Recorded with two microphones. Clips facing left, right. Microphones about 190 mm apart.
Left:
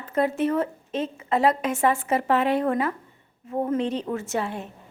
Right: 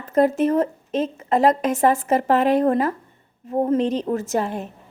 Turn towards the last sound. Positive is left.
turn(degrees=-40)  # may be behind; listen again after turning